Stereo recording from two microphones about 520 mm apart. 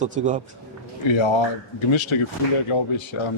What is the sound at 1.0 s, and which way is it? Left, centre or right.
Speech, left.